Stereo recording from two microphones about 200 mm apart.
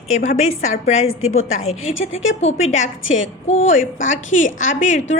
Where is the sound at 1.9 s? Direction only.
75° left (ahead or behind).